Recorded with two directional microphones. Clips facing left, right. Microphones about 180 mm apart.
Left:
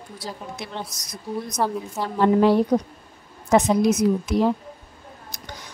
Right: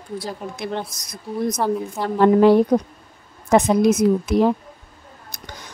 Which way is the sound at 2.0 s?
55° right (ahead or behind).